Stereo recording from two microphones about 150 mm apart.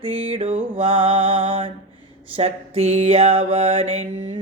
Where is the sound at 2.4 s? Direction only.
45° right (ahead or behind).